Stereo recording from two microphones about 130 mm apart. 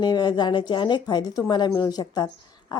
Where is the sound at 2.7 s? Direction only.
35° left (ahead or behind).